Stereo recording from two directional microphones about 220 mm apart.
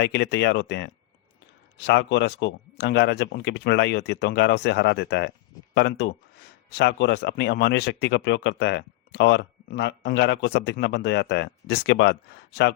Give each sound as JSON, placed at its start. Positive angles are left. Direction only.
{"t": 0.0, "sound": "speech", "side_deg": 50}